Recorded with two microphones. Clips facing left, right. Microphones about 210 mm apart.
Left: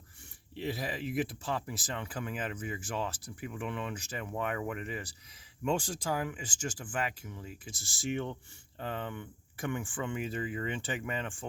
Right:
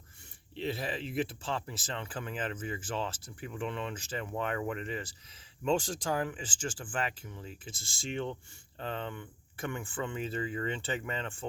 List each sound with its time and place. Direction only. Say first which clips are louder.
0.5 s speech: right 1 dB; 10° left (ahead or behind)